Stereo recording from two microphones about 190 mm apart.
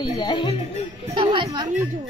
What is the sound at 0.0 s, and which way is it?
Speech, 25° left (ahead or behind).